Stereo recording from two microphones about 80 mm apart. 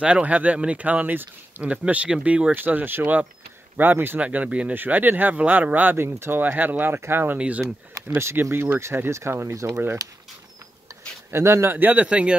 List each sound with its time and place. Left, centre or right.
0.0 s speech: centre
6.0 s speech: right
7.3 s speech: centre
8.1 s speech: right
11.3 s speech: right; by 12.4 s centre